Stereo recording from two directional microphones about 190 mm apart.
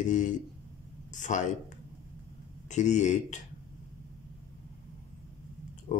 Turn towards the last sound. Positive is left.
turn(degrees=25)  # may be behind; listen again after turning